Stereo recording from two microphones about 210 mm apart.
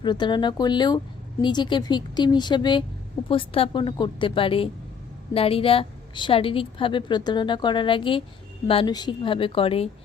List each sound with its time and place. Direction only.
0.0 s a woman's voice: 20° left (ahead or behind)